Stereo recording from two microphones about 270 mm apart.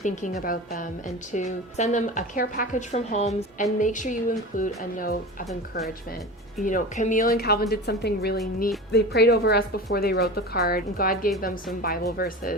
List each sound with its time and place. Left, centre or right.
0.0 s a woman's voice: left
6.6 s a woman's voice: left